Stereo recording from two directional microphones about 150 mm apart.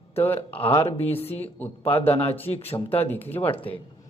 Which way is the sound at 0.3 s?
35° left (ahead or behind).